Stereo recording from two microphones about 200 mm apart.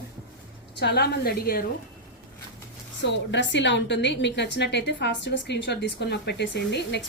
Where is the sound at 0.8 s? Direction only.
55° left (ahead or behind).